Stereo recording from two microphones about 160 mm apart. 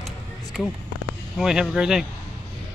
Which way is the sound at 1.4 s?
5° right (ahead or behind).